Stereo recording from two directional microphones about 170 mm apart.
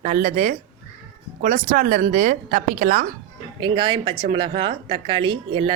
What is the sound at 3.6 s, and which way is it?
A woman's voice, 30° right (ahead or behind).